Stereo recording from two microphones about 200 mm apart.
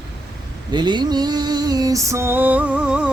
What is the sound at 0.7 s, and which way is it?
Music, 20° right (ahead or behind).